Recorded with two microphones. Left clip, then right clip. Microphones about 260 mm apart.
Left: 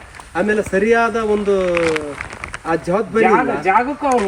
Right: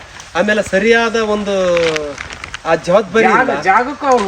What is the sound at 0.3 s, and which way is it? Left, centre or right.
Speech, right.